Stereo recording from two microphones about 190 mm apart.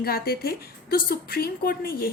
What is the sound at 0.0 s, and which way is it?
A woman's voice, 55° left (ahead or behind).